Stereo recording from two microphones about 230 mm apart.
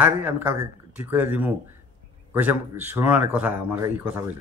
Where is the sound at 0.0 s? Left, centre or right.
Centre.